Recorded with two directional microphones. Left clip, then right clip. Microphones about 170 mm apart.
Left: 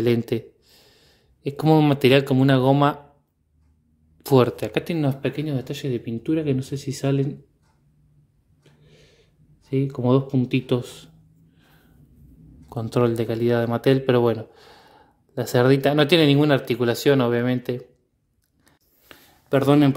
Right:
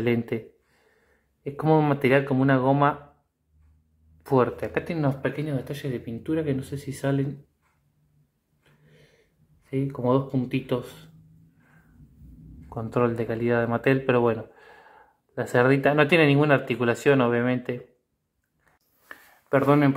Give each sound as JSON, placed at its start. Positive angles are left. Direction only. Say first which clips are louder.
{"t": 0.0, "sound": "speech", "louder": "left 4 dB", "side_deg": 40}
{"t": 4.2, "sound": "speech", "louder": "left 4 dB", "side_deg": 45}
{"t": 5.1, "sound": "speech", "louder": "left 2 dB", "side_deg": 65}
{"t": 8.8, "sound": "a sound", "louder": "left 3 dB", "side_deg": 70}
{"t": 9.7, "sound": "speech", "louder": "left 3 dB", "side_deg": 70}
{"t": 12.6, "sound": "speech", "louder": "left 3 dB", "side_deg": 45}
{"t": 19.5, "sound": "speech", "louder": "left 2 dB", "side_deg": 50}